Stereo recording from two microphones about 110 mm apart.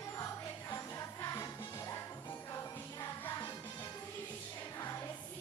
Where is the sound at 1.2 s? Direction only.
30° left (ahead or behind).